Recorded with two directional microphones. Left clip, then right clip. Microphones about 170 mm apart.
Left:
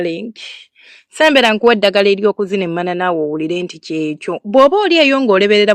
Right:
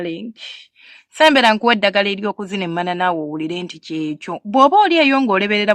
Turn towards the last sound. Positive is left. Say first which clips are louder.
# left 5 dB
turn(degrees=30)  # may be behind; listen again after turning